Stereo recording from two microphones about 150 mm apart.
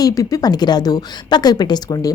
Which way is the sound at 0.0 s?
25° left (ahead or behind).